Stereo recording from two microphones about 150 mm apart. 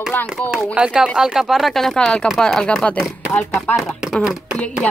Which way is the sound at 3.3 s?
5° left (ahead or behind).